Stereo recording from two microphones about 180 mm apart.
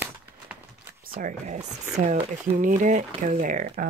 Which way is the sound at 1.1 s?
45° right (ahead or behind).